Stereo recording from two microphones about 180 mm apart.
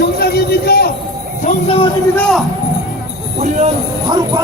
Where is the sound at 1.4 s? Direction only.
45° left (ahead or behind).